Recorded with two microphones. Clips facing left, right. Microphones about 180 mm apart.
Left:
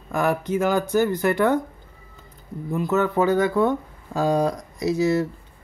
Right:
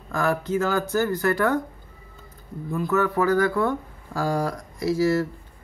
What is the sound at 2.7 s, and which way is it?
Speech, 20° left (ahead or behind).